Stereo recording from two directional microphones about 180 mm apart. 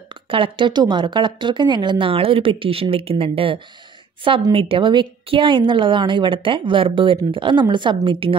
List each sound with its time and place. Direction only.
0.1 s a woman's voice: 30° right (ahead or behind)